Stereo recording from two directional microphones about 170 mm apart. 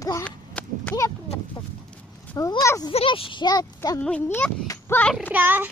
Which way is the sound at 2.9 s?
30° left (ahead or behind).